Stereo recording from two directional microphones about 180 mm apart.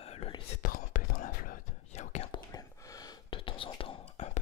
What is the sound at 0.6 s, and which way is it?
Whispering, 50° left (ahead or behind).